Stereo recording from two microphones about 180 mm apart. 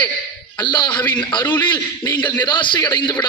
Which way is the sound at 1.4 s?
10° left (ahead or behind).